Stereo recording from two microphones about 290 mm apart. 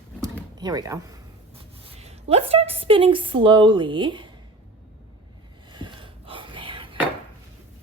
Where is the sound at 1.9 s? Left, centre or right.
Right.